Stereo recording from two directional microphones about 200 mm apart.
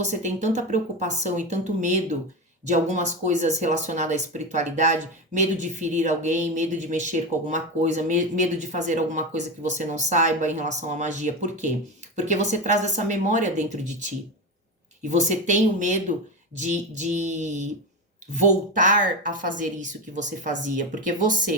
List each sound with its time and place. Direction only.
0.0 s speech: 35° right (ahead or behind)
15.1 s speech: 35° right (ahead or behind)